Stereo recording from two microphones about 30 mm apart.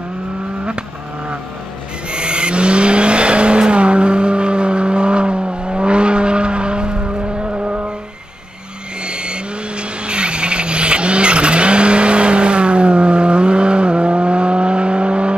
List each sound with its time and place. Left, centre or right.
2.0 s vehicle: right
9.0 s vehicle: right